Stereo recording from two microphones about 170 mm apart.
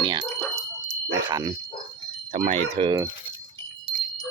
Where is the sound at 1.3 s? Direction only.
25° right (ahead or behind).